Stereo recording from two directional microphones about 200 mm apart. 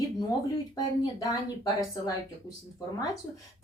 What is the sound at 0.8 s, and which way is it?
A woman's voice, 20° left (ahead or behind).